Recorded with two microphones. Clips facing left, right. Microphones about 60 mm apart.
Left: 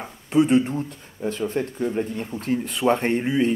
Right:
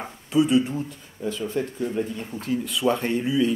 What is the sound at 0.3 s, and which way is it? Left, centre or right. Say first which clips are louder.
Speech: left 2 dB; left.